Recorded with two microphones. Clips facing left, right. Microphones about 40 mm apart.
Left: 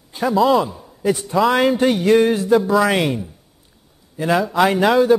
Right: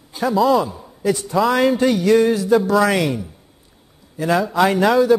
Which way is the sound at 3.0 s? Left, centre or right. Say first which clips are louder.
Even; left.